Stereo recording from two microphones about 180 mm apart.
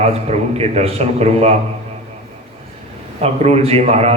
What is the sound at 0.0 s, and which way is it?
A man's voice, 35° right (ahead or behind).